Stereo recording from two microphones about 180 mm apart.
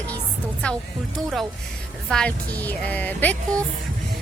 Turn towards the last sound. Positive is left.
turn(degrees=10)  # may be behind; listen again after turning